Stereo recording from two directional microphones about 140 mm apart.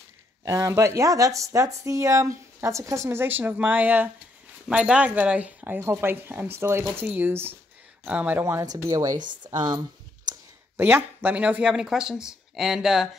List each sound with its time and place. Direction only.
0.5 s speech: 20° right (ahead or behind)
9.2 s speech: 35° right (ahead or behind)
9.6 s a sound: 30° right (ahead or behind)
10.8 s speech: 15° right (ahead or behind)